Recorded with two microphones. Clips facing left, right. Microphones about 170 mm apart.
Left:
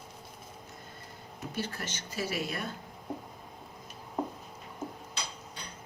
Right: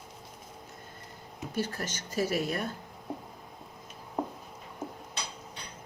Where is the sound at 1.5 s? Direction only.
45° right (ahead or behind).